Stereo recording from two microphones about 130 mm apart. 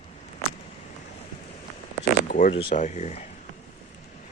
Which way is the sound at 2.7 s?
65° left (ahead or behind).